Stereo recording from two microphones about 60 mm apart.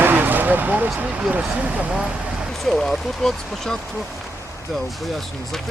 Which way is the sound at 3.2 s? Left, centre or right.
Centre.